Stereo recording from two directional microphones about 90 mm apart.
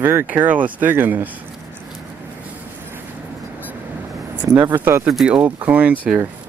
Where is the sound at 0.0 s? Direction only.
25° right (ahead or behind).